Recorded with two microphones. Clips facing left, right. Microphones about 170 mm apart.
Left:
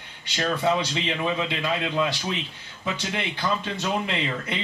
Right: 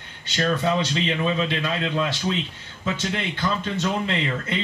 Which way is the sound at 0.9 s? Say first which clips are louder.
Right 3 dB; 15° left (ahead or behind).